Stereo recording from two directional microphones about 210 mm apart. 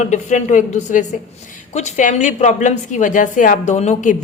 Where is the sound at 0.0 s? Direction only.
35° left (ahead or behind).